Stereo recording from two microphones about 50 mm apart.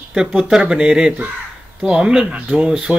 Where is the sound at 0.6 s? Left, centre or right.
Centre.